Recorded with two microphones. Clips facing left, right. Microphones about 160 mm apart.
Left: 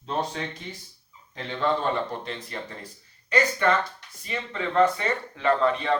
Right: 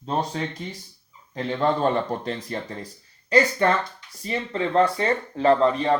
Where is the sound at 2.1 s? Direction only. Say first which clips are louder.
Right 5 dB; 45° right (ahead or behind).